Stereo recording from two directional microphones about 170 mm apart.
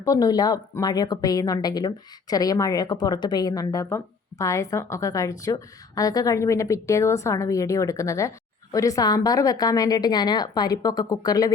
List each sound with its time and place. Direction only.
0.0 s speech: 20° left (ahead or behind)